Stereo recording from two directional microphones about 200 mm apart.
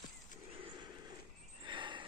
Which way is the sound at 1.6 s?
25° right (ahead or behind).